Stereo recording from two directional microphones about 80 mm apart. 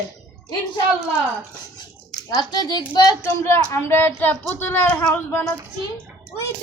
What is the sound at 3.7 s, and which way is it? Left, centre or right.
Speech, left.